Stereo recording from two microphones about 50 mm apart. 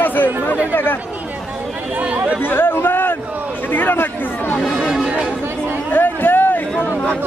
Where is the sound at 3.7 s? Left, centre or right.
Left.